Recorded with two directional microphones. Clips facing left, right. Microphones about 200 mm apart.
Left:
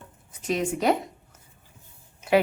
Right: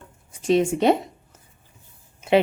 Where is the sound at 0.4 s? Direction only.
25° right (ahead or behind).